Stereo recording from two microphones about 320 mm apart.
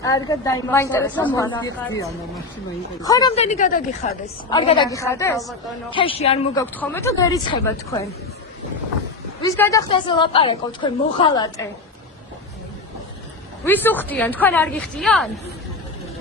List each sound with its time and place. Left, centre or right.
0.0 s a woman's voice: centre
5.9 s a woman's voice: centre
9.4 s a woman's voice: centre
13.7 s a woman's voice: centre